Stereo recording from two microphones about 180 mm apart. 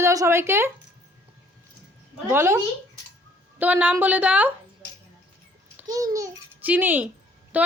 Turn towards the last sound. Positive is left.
turn(degrees=-10)  # may be behind; listen again after turning